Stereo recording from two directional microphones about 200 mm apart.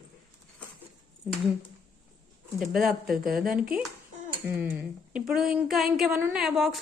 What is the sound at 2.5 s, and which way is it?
Speech, centre (ahead or behind).